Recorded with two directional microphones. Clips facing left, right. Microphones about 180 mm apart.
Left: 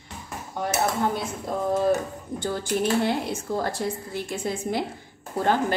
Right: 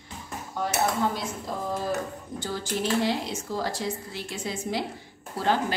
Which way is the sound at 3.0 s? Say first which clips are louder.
Left 2 dB; 55° left (ahead or behind).